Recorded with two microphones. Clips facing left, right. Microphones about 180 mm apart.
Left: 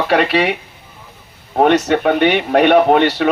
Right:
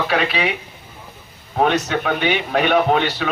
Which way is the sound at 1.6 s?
65° left (ahead or behind).